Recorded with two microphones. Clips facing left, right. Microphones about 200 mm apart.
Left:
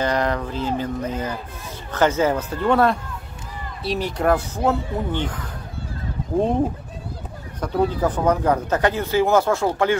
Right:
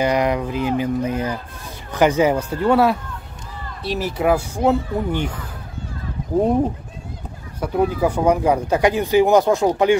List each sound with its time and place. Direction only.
0.0 s speech: 10° right (ahead or behind)
7.6 s speech: 10° right (ahead or behind)